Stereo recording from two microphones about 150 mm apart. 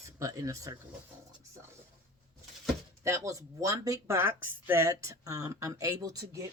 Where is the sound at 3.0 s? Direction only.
20° right (ahead or behind).